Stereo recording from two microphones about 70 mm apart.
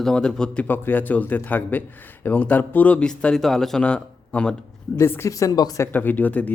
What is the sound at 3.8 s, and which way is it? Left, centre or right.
Speech, centre.